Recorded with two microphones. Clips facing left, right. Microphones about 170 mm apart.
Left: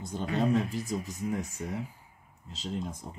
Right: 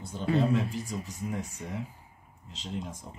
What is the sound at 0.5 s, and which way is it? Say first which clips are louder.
Speech: left 1 dB; 40° left (ahead or behind).